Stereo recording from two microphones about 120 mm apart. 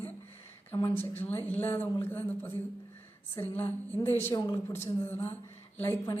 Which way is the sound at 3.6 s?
15° left (ahead or behind).